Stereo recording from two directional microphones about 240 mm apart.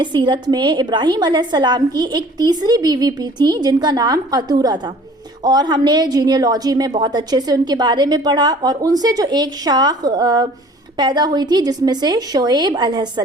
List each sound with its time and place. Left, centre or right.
0.0 s a woman's voice: centre